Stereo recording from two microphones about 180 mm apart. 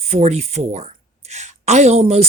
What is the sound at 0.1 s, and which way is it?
Speech, 35° right (ahead or behind).